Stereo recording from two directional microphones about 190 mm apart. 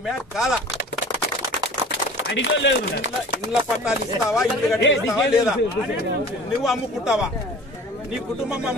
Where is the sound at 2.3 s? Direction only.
70° left (ahead or behind).